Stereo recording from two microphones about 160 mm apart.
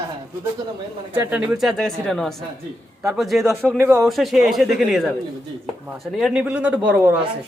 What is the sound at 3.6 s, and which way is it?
Speech, 15° right (ahead or behind).